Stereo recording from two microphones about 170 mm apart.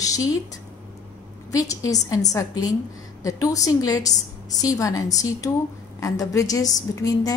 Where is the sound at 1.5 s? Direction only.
20° left (ahead or behind).